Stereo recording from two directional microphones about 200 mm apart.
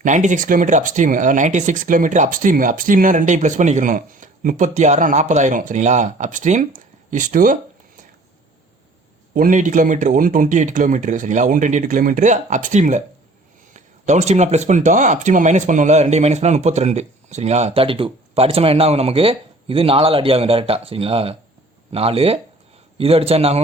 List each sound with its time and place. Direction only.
0.0 s speech: 40° right (ahead or behind)
9.3 s a man's voice: 40° right (ahead or behind)